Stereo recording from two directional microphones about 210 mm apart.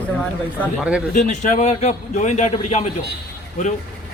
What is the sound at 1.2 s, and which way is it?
A man's voice, 35° left (ahead or behind).